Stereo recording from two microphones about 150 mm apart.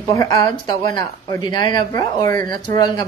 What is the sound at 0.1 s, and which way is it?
Speech, 25° left (ahead or behind).